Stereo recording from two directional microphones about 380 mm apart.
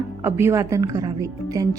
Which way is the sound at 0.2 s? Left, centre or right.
Centre.